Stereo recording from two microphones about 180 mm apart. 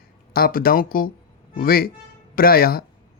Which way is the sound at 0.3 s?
55° left (ahead or behind).